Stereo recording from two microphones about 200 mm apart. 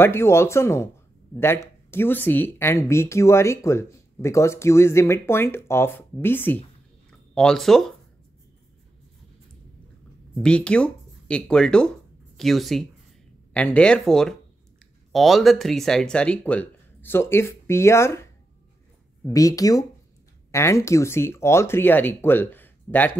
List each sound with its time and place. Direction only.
0.0 s speech: 10° left (ahead or behind)
10.3 s speech: 5° left (ahead or behind)